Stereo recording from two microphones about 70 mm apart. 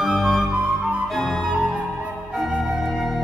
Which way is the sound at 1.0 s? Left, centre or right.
Centre.